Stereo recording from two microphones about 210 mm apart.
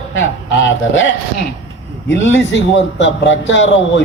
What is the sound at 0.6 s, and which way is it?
Speech, 65° left (ahead or behind).